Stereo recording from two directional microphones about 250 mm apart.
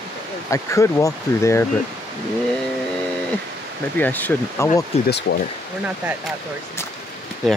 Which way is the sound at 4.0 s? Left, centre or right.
Centre.